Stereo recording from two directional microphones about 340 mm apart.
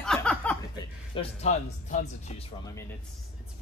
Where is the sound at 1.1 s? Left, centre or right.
Centre.